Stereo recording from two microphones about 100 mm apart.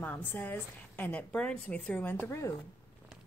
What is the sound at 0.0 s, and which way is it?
A woman's voice, 15° left (ahead or behind).